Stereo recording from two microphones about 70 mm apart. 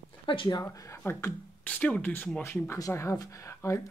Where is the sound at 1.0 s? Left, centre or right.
Left.